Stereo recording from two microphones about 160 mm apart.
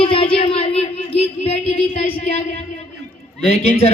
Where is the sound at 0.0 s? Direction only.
35° left (ahead or behind).